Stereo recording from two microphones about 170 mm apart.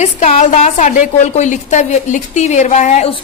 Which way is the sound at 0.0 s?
40° left (ahead or behind).